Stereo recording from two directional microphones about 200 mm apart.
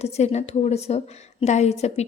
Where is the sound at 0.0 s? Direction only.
30° left (ahead or behind).